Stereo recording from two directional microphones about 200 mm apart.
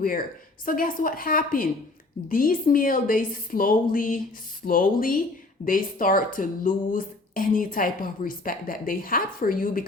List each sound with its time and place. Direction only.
0.0 s speech: 45° left (ahead or behind)